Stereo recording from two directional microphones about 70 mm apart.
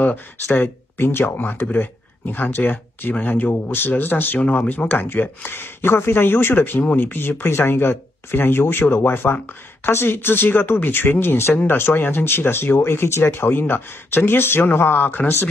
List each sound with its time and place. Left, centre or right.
0.0 s speech: left